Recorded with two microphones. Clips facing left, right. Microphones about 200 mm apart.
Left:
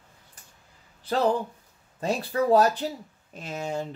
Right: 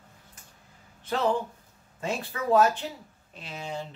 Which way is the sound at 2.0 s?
35° left (ahead or behind).